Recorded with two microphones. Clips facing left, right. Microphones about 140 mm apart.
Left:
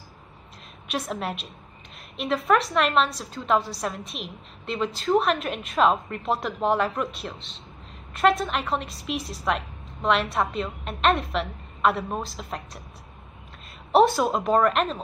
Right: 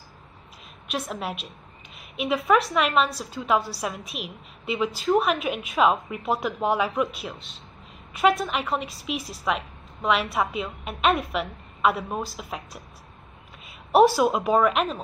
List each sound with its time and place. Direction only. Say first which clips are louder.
0.8 s a woman's voice: left 1 dB; centre (ahead or behind)